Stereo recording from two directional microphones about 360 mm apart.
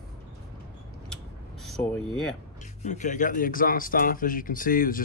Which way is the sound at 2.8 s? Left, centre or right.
Centre.